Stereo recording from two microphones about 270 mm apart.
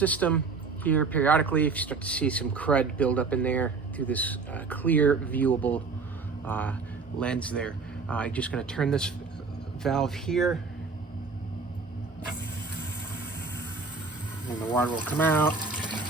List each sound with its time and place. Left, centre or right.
0.0 s speech: centre
14.6 s speech: centre
15.8 s water tap: centre